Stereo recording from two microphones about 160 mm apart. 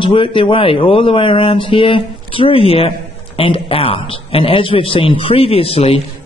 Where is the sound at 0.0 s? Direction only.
35° left (ahead or behind).